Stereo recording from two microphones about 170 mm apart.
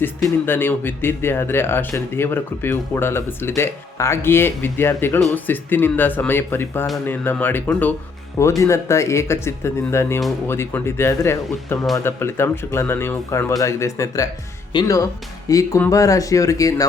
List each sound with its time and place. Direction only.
0.0 s speech: 10° left (ahead or behind)